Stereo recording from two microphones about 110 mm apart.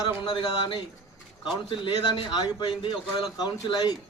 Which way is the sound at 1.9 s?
40° left (ahead or behind).